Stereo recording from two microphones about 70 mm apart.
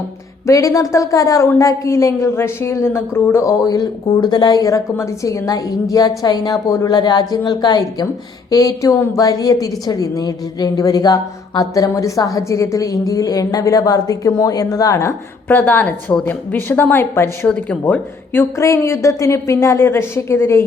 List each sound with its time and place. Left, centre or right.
0.4 s a woman's voice: left
3.6 s speech: left
4.6 s a woman's voice: left
8.4 s a woman's voice: left
15.4 s a woman's voice: left
18.5 s a woman's voice: left